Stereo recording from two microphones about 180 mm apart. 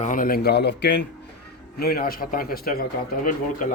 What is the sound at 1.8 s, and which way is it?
A man's voice, 60° left (ahead or behind).